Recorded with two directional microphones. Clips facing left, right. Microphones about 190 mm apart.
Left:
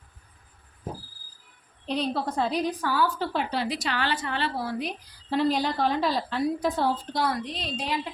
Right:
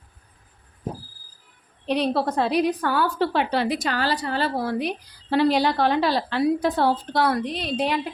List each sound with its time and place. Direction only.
1.9 s a woman's voice: 70° right (ahead or behind); by 4.6 s 40° right (ahead or behind)
4.6 s a woman's voice: 65° right (ahead or behind)